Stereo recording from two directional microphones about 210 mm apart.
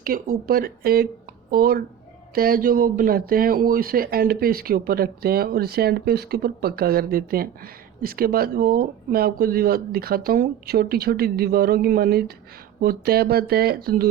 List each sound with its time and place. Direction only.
0.0 s speech: 45° right (ahead or behind)